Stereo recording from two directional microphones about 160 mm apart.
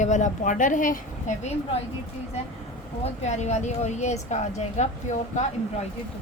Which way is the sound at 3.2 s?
45° left (ahead or behind).